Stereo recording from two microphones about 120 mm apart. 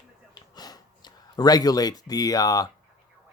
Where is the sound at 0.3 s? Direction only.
35° left (ahead or behind).